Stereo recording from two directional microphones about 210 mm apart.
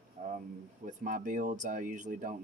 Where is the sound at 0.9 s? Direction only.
40° right (ahead or behind).